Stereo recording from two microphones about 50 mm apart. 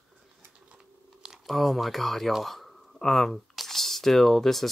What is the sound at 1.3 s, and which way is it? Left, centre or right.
Speech, centre.